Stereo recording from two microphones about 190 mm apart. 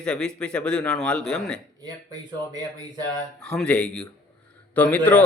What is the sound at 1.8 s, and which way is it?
Speech, 20° right (ahead or behind).